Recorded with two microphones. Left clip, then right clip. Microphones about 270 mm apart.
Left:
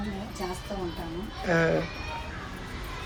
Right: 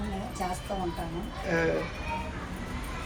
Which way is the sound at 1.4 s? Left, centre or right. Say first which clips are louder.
Left 3 dB; left.